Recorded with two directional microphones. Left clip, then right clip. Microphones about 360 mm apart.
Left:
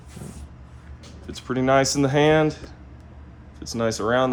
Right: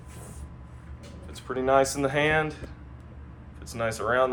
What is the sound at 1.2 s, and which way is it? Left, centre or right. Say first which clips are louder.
Speech: left 4 dB; left.